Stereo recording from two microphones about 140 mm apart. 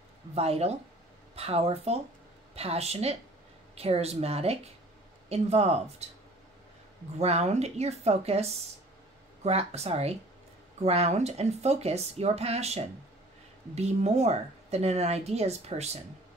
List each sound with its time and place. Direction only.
0.3 s speech: 45° right (ahead or behind)
7.2 s speech: 50° right (ahead or behind)